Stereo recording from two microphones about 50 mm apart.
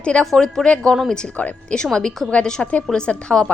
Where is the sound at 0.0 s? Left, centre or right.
Centre.